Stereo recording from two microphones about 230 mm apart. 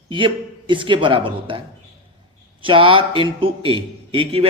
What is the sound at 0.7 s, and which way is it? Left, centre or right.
A man's voice, right.